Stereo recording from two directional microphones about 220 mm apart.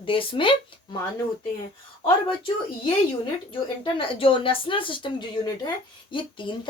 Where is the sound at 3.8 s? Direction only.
25° left (ahead or behind).